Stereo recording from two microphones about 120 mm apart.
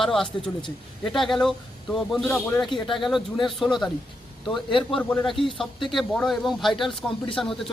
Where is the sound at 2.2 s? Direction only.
10° left (ahead or behind).